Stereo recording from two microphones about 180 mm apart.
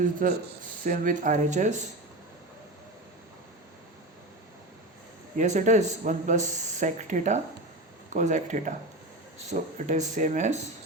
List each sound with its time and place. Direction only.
0.0 s speech: 45° right (ahead or behind)
5.4 s speech: 45° right (ahead or behind)